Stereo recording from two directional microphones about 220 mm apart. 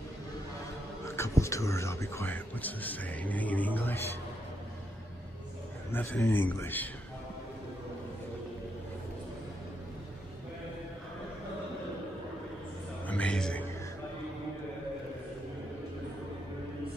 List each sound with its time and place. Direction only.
1.0 s speech: 15° left (ahead or behind)
5.9 s speech: 10° left (ahead or behind)
13.0 s a sound: 5° left (ahead or behind)